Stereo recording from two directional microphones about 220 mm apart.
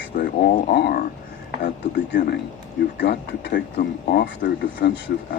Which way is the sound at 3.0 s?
45° left (ahead or behind).